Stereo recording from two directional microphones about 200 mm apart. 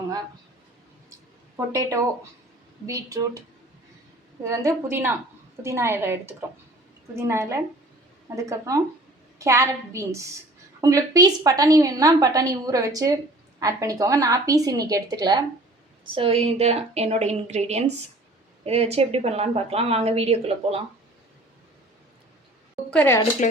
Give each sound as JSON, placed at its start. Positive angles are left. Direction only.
{"t": 1.5, "sound": "a woman's voice", "side_deg": -15}
{"t": 4.4, "sound": "a woman's voice", "side_deg": -15}
{"t": 22.9, "sound": "a woman's voice", "side_deg": 10}
{"t": 23.4, "sound": "speech", "side_deg": 40}